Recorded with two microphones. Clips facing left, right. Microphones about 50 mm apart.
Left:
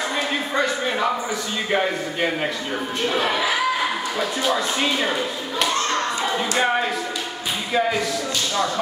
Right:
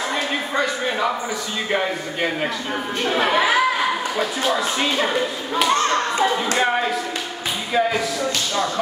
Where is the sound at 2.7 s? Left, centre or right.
Centre.